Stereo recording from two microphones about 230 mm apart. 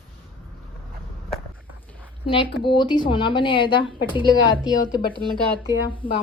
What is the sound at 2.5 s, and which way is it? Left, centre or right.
Speech, left.